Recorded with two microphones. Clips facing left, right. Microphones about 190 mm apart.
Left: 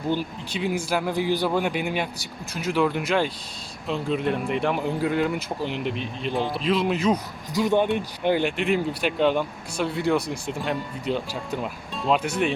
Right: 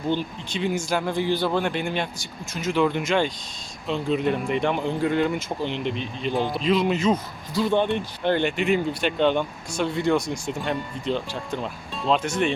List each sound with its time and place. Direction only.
0.1 s speech: 10° left (ahead or behind)
10.2 s speech: 35° left (ahead or behind)
10.6 s speech: 5° left (ahead or behind)